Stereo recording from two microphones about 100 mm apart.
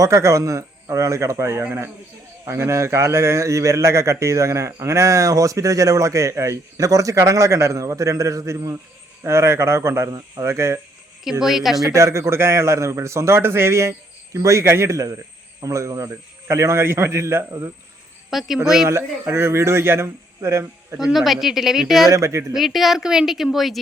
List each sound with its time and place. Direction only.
0.0 s a man's voice: 30° right (ahead or behind)
11.2 s a woman's voice: 5° right (ahead or behind)
11.9 s a man's voice: 30° right (ahead or behind)
18.3 s a woman's voice: 5° right (ahead or behind)
18.9 s speech: 25° right (ahead or behind)
21.0 s a woman's voice: centre (ahead or behind)
22.1 s a man's voice: 30° right (ahead or behind)
22.5 s a woman's voice: centre (ahead or behind)